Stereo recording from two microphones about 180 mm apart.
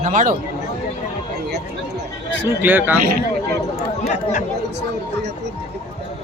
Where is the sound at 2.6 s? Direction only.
10° right (ahead or behind).